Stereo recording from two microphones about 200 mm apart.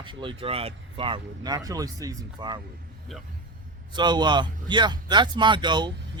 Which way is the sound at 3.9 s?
20° right (ahead or behind).